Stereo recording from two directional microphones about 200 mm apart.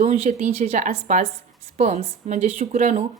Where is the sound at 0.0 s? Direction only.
30° right (ahead or behind).